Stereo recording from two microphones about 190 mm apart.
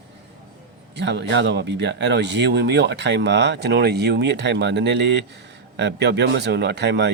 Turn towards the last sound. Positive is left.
turn(degrees=-65)  # may be behind; listen again after turning